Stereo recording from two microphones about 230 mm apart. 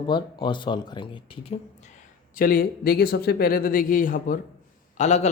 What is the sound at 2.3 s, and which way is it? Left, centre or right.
A man's voice, left.